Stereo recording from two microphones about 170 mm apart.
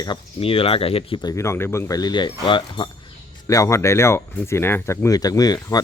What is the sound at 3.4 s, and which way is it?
Speech, 15° left (ahead or behind).